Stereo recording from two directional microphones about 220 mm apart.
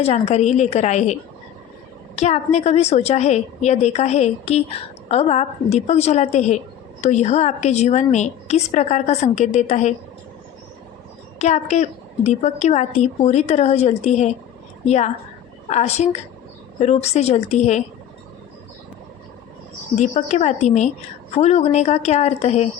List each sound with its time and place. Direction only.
0.0 s a woman's voice: 30° left (ahead or behind)
11.3 s a woman's voice: 30° left (ahead or behind)
20.0 s a woman's voice: 30° left (ahead or behind)